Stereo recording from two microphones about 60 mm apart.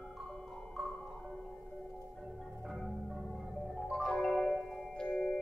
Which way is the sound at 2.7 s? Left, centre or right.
Centre.